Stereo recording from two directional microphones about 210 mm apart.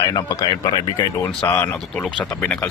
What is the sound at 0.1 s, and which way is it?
A man's voice, 20° left (ahead or behind).